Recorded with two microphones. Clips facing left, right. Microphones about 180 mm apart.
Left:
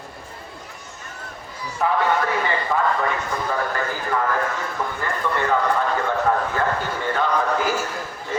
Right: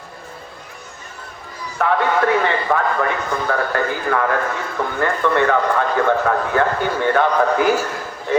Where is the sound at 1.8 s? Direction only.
75° right (ahead or behind).